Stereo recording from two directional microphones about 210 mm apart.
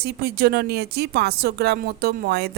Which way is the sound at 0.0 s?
50° right (ahead or behind).